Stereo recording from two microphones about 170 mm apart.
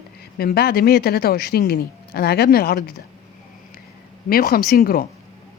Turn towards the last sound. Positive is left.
turn(degrees=60)  # may be behind; listen again after turning